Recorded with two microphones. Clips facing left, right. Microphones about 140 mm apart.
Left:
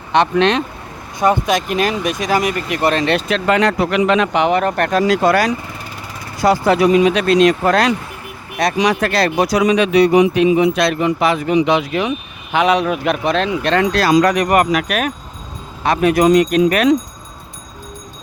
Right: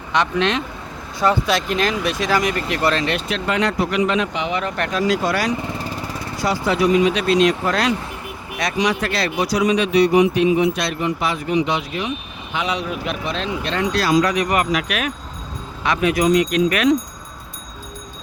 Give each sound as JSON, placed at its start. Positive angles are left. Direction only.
{"t": 0.1, "sound": "speech", "side_deg": 60}
{"t": 1.2, "sound": "speech", "side_deg": 20}
{"t": 3.0, "sound": "speech", "side_deg": 40}
{"t": 3.2, "sound": "speech", "side_deg": 80}
{"t": 8.6, "sound": "speech", "side_deg": 35}
{"t": 14.3, "sound": "speech", "side_deg": 50}